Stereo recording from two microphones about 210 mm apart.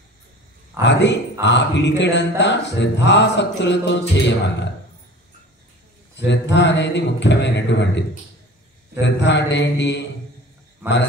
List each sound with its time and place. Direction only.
0.8 s speech: 55° left (ahead or behind)
6.2 s speech: 55° left (ahead or behind)
9.0 s speech: 55° left (ahead or behind)